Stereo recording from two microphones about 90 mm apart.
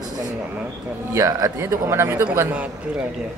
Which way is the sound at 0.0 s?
45° right (ahead or behind).